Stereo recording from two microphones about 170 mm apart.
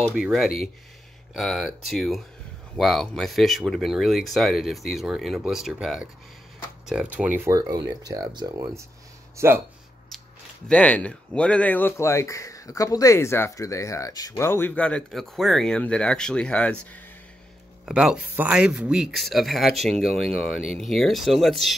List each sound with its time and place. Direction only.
0.1 s speech: centre (ahead or behind); by 9.5 s 15° right (ahead or behind)
10.7 s speech: 5° left (ahead or behind)
17.8 s speech: 5° right (ahead or behind)